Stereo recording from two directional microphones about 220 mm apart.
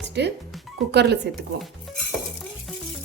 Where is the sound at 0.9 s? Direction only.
50° right (ahead or behind).